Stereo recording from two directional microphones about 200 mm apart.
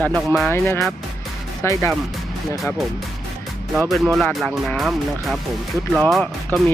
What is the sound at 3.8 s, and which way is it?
Speech, centre (ahead or behind).